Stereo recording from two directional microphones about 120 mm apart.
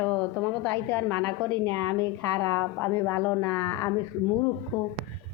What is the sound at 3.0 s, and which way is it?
A woman's voice, 20° left (ahead or behind).